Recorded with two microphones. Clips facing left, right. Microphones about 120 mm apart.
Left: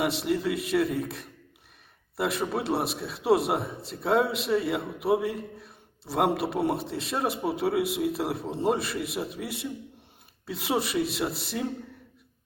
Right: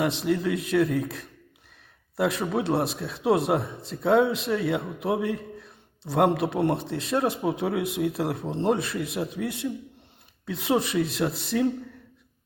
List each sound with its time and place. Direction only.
0.0 s a man's voice: centre (ahead or behind)